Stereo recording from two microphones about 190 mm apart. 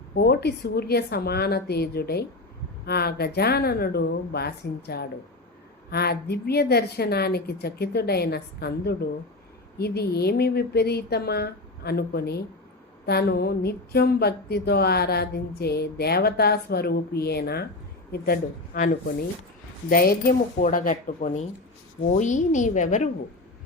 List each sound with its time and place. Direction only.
0.1 s speech: 55° left (ahead or behind)
19.9 s a woman's voice: 50° left (ahead or behind)